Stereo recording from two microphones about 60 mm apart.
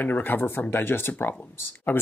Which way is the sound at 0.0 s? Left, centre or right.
Left.